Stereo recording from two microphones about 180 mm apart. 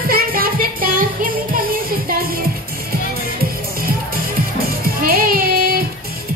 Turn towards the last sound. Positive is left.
turn(degrees=-55)  # may be behind; listen again after turning